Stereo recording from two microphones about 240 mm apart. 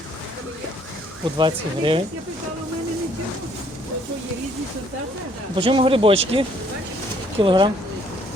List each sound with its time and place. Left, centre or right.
1.4 s speech: centre
5.5 s speech: right